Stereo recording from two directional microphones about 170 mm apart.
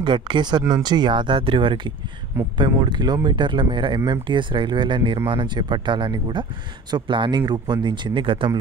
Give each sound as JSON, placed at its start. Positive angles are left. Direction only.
{"t": 0.0, "sound": "speech", "side_deg": -25}